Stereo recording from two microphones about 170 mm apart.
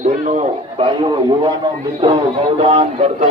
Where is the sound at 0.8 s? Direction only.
30° right (ahead or behind).